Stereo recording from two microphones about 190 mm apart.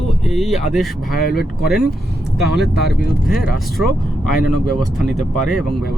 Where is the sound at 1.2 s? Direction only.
55° left (ahead or behind).